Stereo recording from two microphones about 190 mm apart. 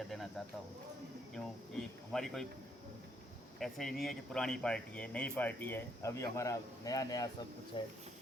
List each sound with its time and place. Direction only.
0.1 s cricket: centre (ahead or behind)
1.3 s speech: centre (ahead or behind)
3.6 s speech: centre (ahead or behind); by 7.8 s 20° left (ahead or behind)